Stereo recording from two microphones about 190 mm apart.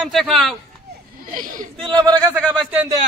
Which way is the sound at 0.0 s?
Centre (ahead or behind).